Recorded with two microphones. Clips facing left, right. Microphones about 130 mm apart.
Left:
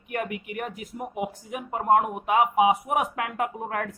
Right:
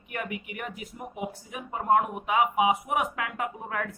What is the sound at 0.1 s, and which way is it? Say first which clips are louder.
Speech: left 4 dB; 50° left (ahead or behind).